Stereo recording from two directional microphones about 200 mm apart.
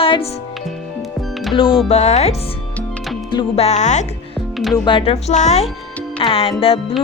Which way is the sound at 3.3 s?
30° left (ahead or behind).